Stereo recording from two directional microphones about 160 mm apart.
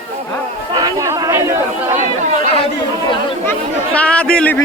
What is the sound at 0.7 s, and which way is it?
Chatter, 25° right (ahead or behind).